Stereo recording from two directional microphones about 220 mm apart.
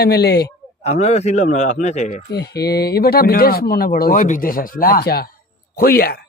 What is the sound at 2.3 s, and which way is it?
Speech, 45° left (ahead or behind).